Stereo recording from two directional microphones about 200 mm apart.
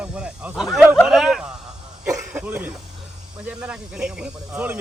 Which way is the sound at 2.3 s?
5° right (ahead or behind).